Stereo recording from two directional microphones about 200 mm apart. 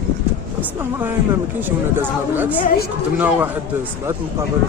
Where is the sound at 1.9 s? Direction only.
10° right (ahead or behind).